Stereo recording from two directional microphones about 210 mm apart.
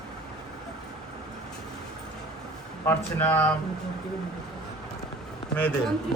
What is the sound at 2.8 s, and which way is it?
Speech, 10° left (ahead or behind).